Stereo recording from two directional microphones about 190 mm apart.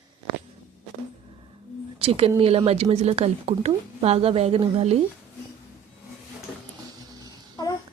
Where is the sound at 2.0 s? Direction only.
30° right (ahead or behind).